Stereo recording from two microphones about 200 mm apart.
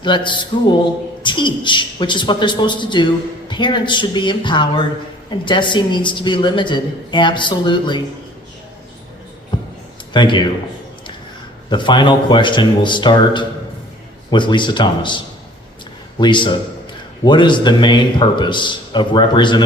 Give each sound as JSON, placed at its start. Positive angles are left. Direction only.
{"t": 0.0, "sound": "a woman's voice", "side_deg": 25}
{"t": 9.5, "sound": "a sound", "side_deg": 25}
{"t": 10.1, "sound": "a man's voice", "side_deg": 20}
{"t": 11.7, "sound": "a woman's voice", "side_deg": 25}